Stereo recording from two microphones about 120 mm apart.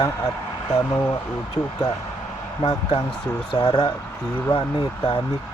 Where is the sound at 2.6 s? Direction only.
40° left (ahead or behind).